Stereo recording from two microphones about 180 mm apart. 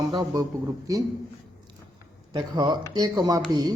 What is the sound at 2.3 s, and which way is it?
A man's voice, 25° right (ahead or behind).